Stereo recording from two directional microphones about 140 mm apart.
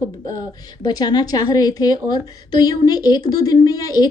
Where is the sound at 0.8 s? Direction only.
30° left (ahead or behind).